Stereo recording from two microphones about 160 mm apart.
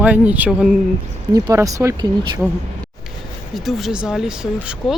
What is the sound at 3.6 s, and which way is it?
Speech, centre (ahead or behind).